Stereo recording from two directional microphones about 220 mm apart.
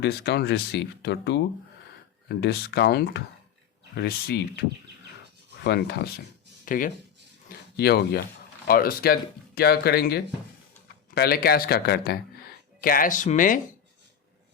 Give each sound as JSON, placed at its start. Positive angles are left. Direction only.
{"t": 0.0, "sound": "speech", "side_deg": 45}
{"t": 5.6, "sound": "speech", "side_deg": 50}
{"t": 6.7, "sound": "speech", "side_deg": 40}